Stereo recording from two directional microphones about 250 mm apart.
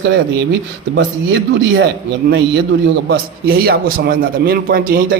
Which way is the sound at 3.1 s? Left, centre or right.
Right.